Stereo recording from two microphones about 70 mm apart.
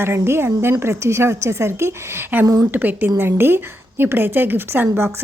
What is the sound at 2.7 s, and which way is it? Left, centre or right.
A woman's voice, right.